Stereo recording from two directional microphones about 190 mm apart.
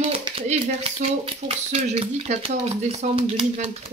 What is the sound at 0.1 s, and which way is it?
Speech, 30° right (ahead or behind).